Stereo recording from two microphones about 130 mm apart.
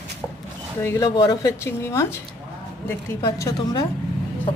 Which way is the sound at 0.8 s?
25° left (ahead or behind).